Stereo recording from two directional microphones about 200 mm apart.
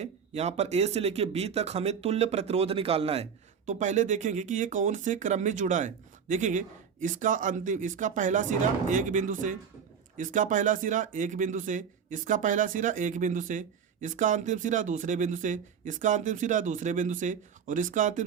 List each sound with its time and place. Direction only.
0.0 s speech: 35° right (ahead or behind)